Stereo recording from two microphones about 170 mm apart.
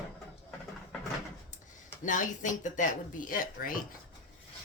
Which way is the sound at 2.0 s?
50° left (ahead or behind).